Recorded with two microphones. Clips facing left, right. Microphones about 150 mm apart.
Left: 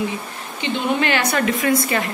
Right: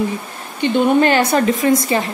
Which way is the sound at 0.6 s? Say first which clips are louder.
Right 8 dB; 45° right (ahead or behind).